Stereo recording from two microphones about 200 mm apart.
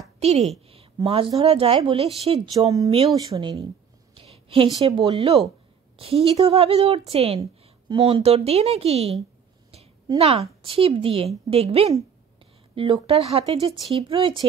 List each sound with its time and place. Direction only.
0.2 s a woman's voice: 35° right (ahead or behind)
2.5 s speech: 15° right (ahead or behind)
4.2 s a sound: 30° right (ahead or behind)
4.9 s speech: 25° right (ahead or behind)